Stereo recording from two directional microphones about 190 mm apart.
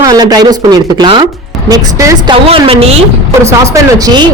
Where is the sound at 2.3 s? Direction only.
30° right (ahead or behind).